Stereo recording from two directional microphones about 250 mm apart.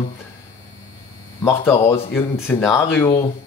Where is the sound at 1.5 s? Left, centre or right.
Centre.